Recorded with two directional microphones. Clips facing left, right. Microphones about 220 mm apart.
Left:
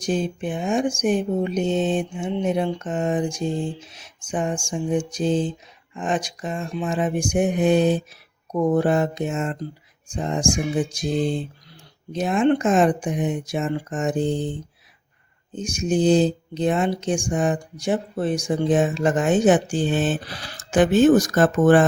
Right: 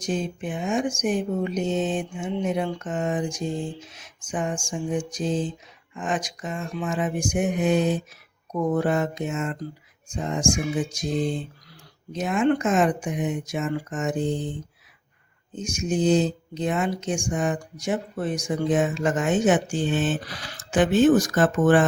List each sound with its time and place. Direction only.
0.0 s speech: 30° left (ahead or behind)
15.5 s speech: 30° left (ahead or behind)